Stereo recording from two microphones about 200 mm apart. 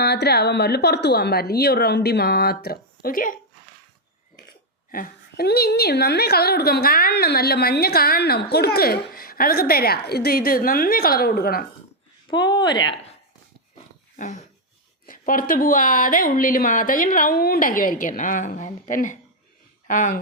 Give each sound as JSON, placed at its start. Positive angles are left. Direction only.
{"t": 0.0, "sound": "a woman's voice", "side_deg": 55}
{"t": 4.9, "sound": "a woman's voice", "side_deg": 45}
{"t": 12.3, "sound": "speech", "side_deg": 20}
{"t": 14.2, "sound": "a woman's voice", "side_deg": 35}